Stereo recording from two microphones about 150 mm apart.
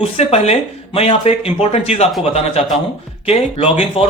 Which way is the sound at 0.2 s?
45° left (ahead or behind).